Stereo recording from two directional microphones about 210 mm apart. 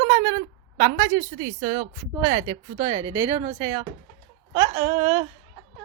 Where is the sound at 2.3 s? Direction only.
30° right (ahead or behind).